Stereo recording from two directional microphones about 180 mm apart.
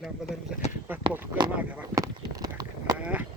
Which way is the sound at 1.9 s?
20° right (ahead or behind).